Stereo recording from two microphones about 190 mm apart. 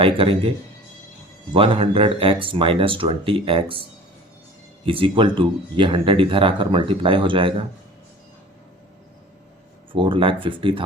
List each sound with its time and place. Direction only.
0.0 s speech: 30° right (ahead or behind)
1.5 s speech: 30° right (ahead or behind)
4.9 s speech: 25° right (ahead or behind)
9.9 s speech: 25° right (ahead or behind)